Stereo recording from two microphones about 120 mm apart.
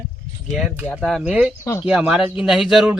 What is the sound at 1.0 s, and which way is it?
A man's voice, 5° right (ahead or behind).